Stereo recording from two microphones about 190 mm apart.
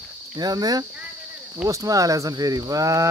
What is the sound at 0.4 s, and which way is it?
Speech, 20° right (ahead or behind).